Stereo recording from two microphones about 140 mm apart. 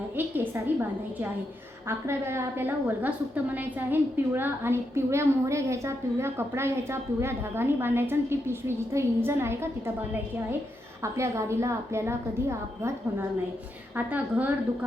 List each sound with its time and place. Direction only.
0.2 s a woman's voice: 15° right (ahead or behind)
11.0 s a woman's voice: 20° right (ahead or behind)